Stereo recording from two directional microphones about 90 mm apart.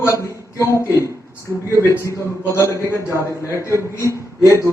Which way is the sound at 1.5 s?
30° left (ahead or behind).